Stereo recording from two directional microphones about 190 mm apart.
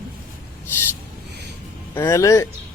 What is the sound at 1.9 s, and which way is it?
Speech, 15° left (ahead or behind).